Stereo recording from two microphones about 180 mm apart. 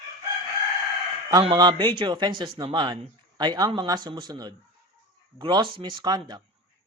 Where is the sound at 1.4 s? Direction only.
25° right (ahead or behind).